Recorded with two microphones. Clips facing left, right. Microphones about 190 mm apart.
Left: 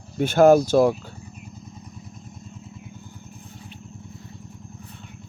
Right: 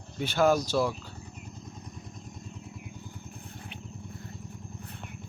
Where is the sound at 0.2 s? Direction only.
50° left (ahead or behind).